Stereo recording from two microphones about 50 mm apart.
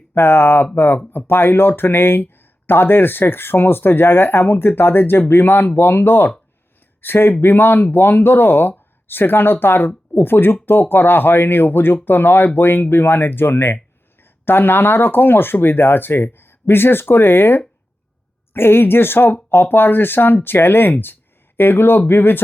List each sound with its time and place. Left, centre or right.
0.1 s speech: left